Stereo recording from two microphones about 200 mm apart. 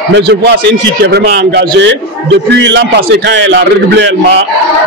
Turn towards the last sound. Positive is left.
turn(degrees=-65)  # may be behind; listen again after turning